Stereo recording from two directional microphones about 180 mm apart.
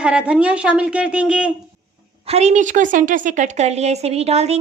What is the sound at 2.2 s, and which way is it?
A woman's voice, 35° right (ahead or behind).